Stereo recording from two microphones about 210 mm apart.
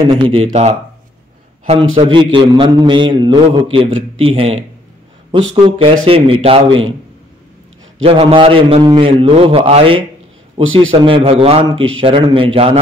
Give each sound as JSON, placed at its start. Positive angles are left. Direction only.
{"t": 0.1, "sound": "a man's voice", "side_deg": -25}
{"t": 2.0, "sound": "a man's voice", "side_deg": -25}
{"t": 8.0, "sound": "a man's voice", "side_deg": -25}